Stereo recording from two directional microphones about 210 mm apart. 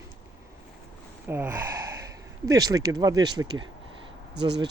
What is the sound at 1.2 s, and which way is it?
Speech, 10° right (ahead or behind).